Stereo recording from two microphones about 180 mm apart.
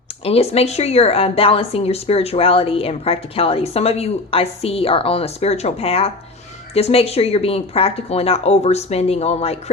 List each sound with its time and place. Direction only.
0.3 s a woman's voice: 35° left (ahead or behind)